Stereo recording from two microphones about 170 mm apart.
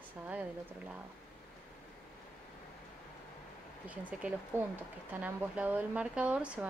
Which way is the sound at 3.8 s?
10° right (ahead or behind).